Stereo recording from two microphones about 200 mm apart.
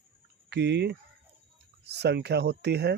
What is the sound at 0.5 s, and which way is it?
Speech, 60° right (ahead or behind).